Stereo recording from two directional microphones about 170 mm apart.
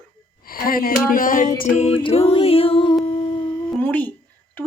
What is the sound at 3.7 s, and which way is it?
Speech, 10° left (ahead or behind).